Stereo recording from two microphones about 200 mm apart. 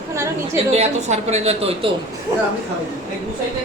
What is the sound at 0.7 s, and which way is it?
A woman's voice, 35° right (ahead or behind).